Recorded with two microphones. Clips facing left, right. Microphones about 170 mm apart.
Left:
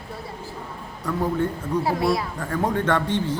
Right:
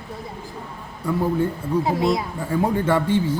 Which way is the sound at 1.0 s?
15° right (ahead or behind).